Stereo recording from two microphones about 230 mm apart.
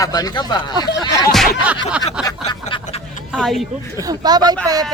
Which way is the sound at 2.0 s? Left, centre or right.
Centre.